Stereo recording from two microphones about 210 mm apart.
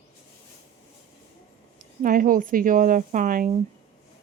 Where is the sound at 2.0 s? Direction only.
40° right (ahead or behind).